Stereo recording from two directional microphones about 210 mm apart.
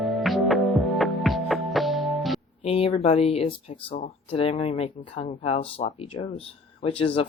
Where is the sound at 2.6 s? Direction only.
30° left (ahead or behind).